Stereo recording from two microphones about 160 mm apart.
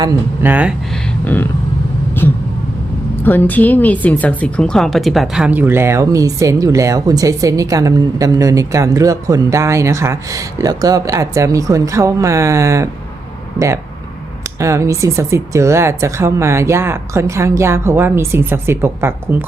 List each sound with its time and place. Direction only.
0.4 s speech: 10° right (ahead or behind)
1.2 s vehicle: 10° left (ahead or behind)
3.2 s speech: 10° left (ahead or behind); by 12.9 s 20° right (ahead or behind)
14.6 s speech: 20° right (ahead or behind)